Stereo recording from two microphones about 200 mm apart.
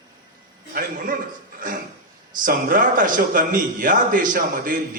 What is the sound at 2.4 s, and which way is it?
A man's voice, 45° right (ahead or behind).